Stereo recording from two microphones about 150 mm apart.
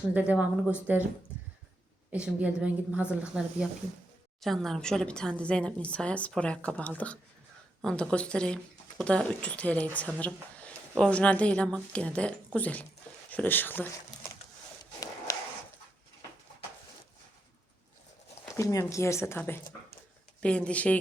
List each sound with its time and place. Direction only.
0.1 s a woman's voice: 10° right (ahead or behind)
2.1 s a woman's voice: 5° right (ahead or behind); by 13.8 s 15° left (ahead or behind)
15.3 s a sound: 20° left (ahead or behind)
18.4 s speech: 20° left (ahead or behind)